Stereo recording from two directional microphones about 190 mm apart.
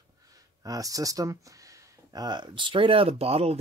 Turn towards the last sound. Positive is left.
turn(degrees=-30)  # may be behind; listen again after turning